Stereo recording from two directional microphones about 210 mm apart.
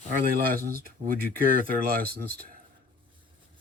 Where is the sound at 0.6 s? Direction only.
45° right (ahead or behind).